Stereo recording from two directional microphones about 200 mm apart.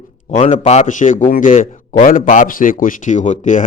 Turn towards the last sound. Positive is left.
turn(degrees=40)  # may be behind; listen again after turning